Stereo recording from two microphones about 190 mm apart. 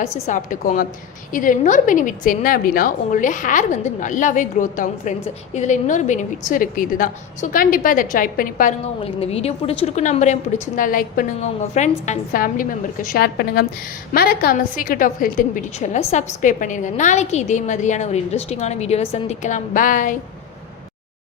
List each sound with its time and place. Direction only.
0.0 s a woman's voice: 40° left (ahead or behind)
9.0 s a woman's voice: 30° left (ahead or behind)